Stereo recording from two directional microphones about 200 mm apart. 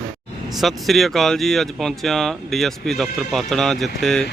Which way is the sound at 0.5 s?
Centre (ahead or behind).